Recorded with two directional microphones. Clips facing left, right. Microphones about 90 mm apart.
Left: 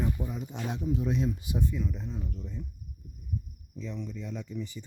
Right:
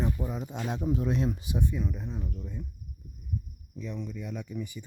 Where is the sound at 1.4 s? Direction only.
25° right (ahead or behind).